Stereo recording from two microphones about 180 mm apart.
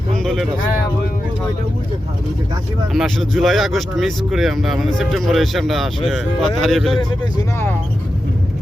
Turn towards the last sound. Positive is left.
turn(degrees=15)  # may be behind; listen again after turning